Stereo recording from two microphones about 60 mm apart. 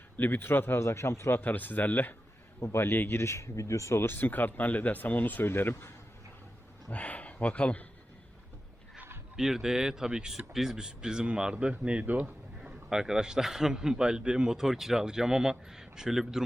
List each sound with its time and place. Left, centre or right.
0.2 s a man's voice: left
2.6 s speech: left
4.0 s a man's voice: left
6.9 s speech: left
9.3 s a man's voice: centre; by 12.3 s right
12.6 s a man's voice: centre